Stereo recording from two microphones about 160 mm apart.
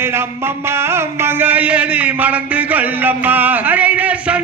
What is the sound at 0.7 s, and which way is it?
Music, 15° right (ahead or behind).